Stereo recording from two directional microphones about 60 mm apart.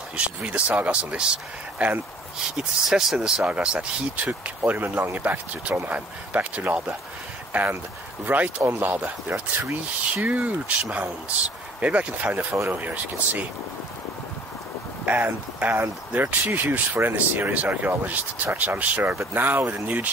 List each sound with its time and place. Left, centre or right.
0.1 s speech: right
3.4 s speech: centre
4.6 s speech: right
10.1 s speech: right
15.0 s speech: right